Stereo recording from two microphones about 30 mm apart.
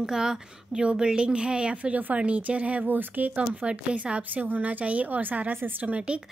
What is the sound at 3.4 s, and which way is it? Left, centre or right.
Speech, right.